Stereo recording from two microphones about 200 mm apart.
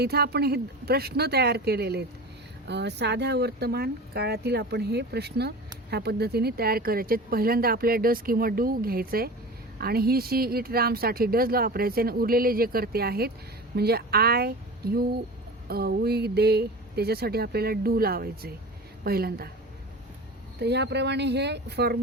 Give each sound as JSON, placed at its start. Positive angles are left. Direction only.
{"t": 0.0, "sound": "speech", "side_deg": -55}
{"t": 20.6, "sound": "speech", "side_deg": -55}